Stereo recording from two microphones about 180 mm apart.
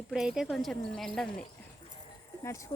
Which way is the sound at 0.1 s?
5° right (ahead or behind).